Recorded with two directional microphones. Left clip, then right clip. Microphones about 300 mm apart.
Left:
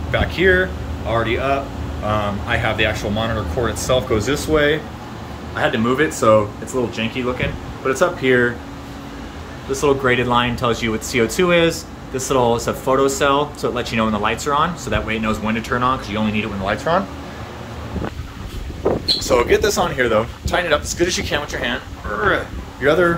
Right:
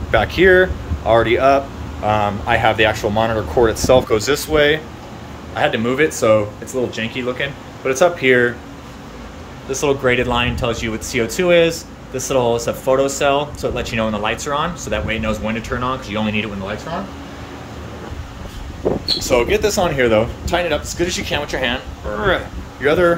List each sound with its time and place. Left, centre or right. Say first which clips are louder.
0.1 s speech: right 4 dB; centre
4.5 s speech: right 1 dB; centre
9.7 s speech: even; centre
19.1 s speech: even; centre